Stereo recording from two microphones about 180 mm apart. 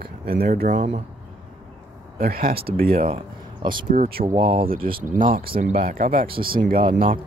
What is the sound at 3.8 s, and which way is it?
Speech, 55° right (ahead or behind).